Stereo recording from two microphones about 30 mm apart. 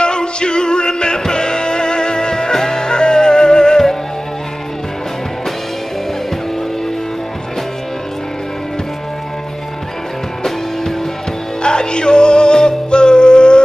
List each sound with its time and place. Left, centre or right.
0.0 s music: left
10.4 s music: centre
11.6 s music: left